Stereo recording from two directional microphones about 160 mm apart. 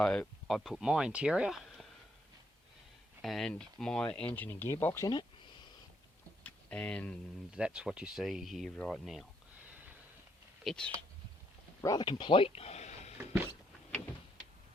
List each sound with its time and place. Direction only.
0.0 s speech: 5° left (ahead or behind)
3.2 s speech: centre (ahead or behind)
6.4 s a sound: 5° left (ahead or behind)
7.5 s speech: 5° right (ahead or behind)
10.6 s speech: 5° left (ahead or behind)
11.8 s speech: 25° left (ahead or behind); by 13.1 s 45° left (ahead or behind)